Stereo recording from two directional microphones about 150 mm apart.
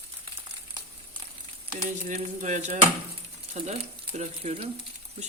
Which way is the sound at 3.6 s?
50° right (ahead or behind).